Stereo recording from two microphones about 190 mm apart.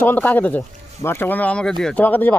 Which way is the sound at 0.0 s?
10° left (ahead or behind).